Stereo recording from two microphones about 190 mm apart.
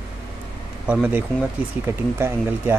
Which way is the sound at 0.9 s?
10° right (ahead or behind).